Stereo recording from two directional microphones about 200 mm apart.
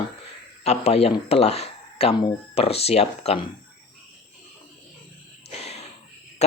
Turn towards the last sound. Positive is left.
turn(degrees=30)  # may be behind; listen again after turning